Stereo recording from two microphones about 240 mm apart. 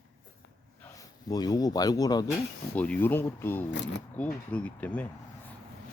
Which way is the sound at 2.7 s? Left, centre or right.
Centre.